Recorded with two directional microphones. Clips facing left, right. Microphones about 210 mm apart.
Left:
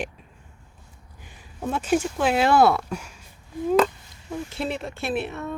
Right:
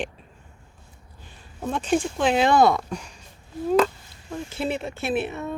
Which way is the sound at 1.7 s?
5° left (ahead or behind).